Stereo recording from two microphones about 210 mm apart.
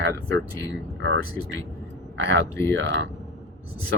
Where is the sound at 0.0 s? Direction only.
60° right (ahead or behind).